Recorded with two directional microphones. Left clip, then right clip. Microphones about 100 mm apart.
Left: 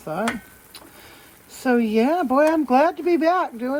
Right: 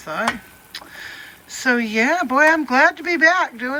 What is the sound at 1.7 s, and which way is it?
Speech, 45° right (ahead or behind).